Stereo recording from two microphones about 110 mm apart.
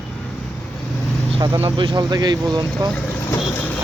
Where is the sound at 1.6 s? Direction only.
50° right (ahead or behind).